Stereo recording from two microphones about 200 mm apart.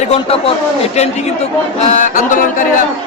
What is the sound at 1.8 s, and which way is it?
Speech, 35° left (ahead or behind).